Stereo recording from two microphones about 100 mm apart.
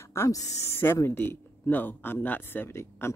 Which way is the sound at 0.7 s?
25° left (ahead or behind).